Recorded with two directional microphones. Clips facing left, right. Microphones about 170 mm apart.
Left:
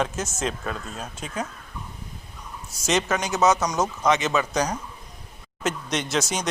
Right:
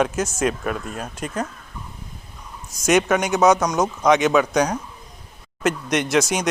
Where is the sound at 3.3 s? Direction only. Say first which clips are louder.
Right 3 dB; 5° left (ahead or behind).